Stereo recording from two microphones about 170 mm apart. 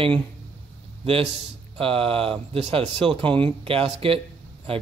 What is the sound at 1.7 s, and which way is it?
Speech, 35° right (ahead or behind).